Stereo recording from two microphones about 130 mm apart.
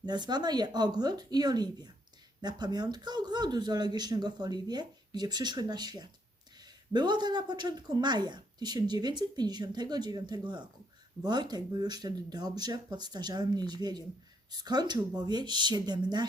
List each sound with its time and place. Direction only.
0.0 s speech: 35° right (ahead or behind)